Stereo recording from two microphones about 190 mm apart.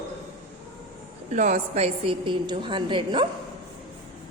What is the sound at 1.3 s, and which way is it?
A woman's voice, 40° right (ahead or behind).